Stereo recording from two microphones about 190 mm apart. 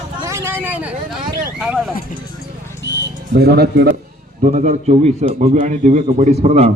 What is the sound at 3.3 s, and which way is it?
Speech, 55° right (ahead or behind).